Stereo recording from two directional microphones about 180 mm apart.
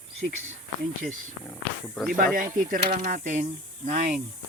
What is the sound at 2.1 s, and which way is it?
Speech, 50° right (ahead or behind).